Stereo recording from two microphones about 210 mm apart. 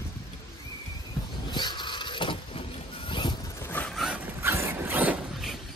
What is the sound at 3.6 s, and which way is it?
Dog, 10° left (ahead or behind).